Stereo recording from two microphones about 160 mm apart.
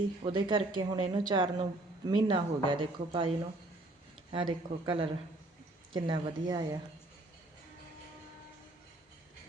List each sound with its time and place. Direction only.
0.3 s a woman's voice: 30° right (ahead or behind)